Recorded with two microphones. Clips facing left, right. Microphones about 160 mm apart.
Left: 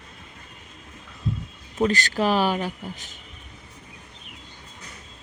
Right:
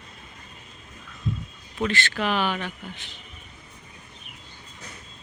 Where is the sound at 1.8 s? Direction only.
40° left (ahead or behind).